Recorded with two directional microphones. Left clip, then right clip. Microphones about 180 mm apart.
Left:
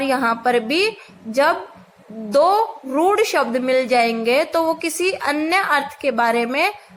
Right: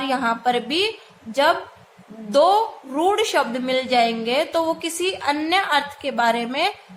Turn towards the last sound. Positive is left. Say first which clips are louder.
# left 2 dB
turn(degrees=30)  # may be behind; listen again after turning